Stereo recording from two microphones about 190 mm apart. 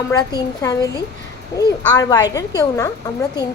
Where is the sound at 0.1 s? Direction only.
20° left (ahead or behind).